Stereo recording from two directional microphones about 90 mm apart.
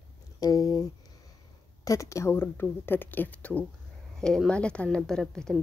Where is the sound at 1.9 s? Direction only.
35° left (ahead or behind); by 5.6 s 5° left (ahead or behind).